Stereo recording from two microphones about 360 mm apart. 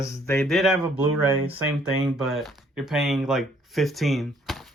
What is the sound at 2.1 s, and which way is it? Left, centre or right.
Speech, centre.